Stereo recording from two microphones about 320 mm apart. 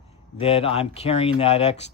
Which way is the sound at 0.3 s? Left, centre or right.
Centre.